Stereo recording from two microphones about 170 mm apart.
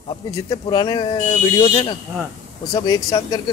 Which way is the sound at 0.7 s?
25° left (ahead or behind).